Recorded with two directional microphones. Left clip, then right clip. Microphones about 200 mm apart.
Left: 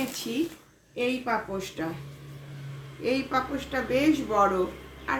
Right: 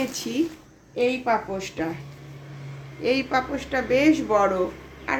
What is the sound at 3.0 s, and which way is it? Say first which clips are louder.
A woman's voice: right 4 dB; 10° left (ahead or behind).